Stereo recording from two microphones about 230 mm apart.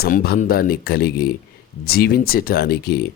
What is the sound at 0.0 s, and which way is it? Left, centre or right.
Speech, left.